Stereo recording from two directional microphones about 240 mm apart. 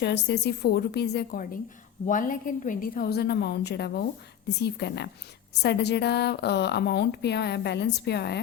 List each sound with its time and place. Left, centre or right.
0.0 s a woman's voice: left